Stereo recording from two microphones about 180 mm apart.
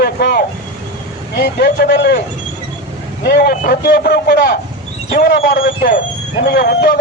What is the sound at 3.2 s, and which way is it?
A man's voice, 60° left (ahead or behind).